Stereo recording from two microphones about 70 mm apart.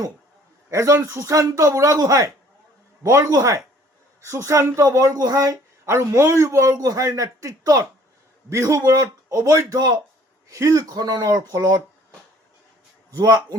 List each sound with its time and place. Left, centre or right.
0.7 s a man's voice: right
4.8 s a man's voice: right
5.9 s a man's voice: right
9.7 s a man's voice: right
10.5 s speech: right
13.1 s a man's voice: right